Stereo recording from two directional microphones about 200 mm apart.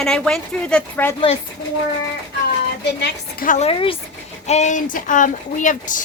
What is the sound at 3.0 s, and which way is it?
Speech, 40° left (ahead or behind).